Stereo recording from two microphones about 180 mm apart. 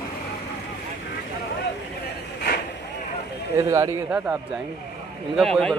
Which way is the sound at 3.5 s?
15° right (ahead or behind).